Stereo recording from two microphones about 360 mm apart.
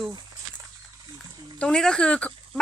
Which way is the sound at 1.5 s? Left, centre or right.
Centre.